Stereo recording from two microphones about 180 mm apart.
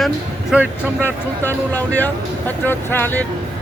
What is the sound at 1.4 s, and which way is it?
Speech, 10° left (ahead or behind).